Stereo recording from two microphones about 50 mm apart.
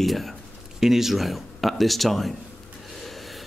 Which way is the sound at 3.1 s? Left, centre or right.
Centre.